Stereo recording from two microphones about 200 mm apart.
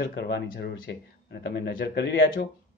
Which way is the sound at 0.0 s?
55° left (ahead or behind).